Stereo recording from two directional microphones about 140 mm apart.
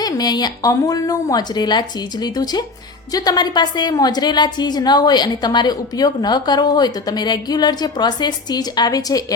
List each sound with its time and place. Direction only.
0.0 s a woman's voice: 30° left (ahead or behind)